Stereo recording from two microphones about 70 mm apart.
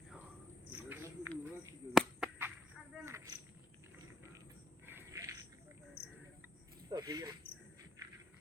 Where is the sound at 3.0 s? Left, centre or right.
Right.